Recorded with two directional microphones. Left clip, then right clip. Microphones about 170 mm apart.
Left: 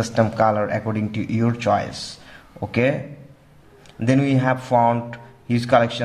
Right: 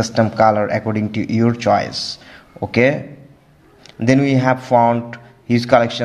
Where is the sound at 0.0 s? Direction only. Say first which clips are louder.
Right 4 dB; 15° right (ahead or behind).